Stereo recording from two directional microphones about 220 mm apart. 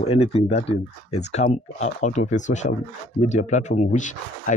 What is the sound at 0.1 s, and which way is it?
Speech, 25° left (ahead or behind).